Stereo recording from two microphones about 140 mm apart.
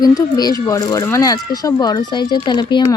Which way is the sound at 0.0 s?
30° left (ahead or behind).